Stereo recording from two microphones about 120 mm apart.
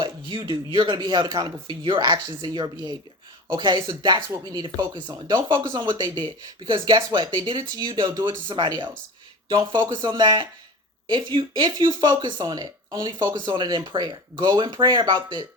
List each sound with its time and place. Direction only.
0.3 s speech: 40° right (ahead or behind)
1.8 s speech: 50° right (ahead or behind)